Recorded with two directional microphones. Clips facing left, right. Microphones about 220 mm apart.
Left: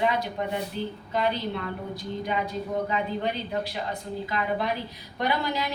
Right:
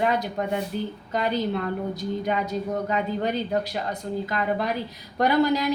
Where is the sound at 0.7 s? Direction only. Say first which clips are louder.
Right 2 dB; 45° right (ahead or behind).